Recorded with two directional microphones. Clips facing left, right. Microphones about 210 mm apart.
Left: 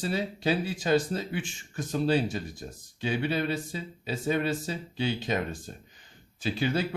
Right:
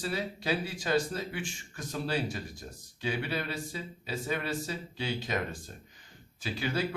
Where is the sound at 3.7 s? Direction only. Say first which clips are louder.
Left 3 dB; 25° left (ahead or behind).